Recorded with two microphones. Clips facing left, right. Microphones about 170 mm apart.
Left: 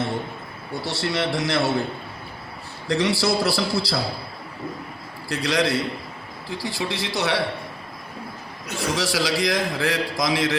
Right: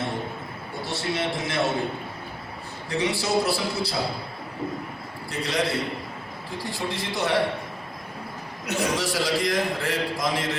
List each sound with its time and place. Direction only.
0.8 s a man's voice: 80° left
2.9 s a man's voice: 90° left
5.3 s a man's voice: 90° left
9.0 s a man's voice: 90° left